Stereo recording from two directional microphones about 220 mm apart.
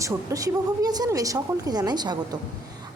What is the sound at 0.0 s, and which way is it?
A woman's voice, 15° right (ahead or behind).